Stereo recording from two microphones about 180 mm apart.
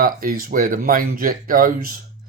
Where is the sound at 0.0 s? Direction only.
55° right (ahead or behind).